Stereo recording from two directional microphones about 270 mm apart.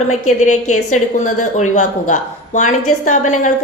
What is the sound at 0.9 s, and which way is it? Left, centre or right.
A woman's voice, left.